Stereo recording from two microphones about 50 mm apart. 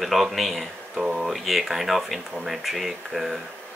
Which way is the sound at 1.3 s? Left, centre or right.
Centre.